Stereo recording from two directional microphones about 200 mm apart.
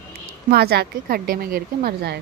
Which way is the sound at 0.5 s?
55° right (ahead or behind).